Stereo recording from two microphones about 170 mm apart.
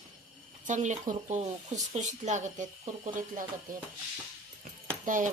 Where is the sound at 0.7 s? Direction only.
45° right (ahead or behind).